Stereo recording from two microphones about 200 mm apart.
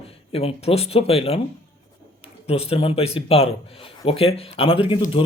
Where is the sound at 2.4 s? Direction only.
30° left (ahead or behind).